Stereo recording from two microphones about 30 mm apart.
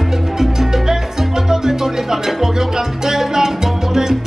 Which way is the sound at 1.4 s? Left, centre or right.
Centre.